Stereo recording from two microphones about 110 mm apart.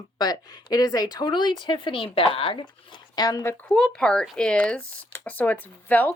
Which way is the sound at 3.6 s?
10° left (ahead or behind).